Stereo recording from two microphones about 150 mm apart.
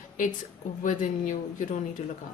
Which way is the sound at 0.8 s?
60° left (ahead or behind).